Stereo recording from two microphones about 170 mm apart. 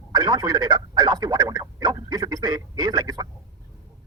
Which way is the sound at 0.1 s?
25° right (ahead or behind).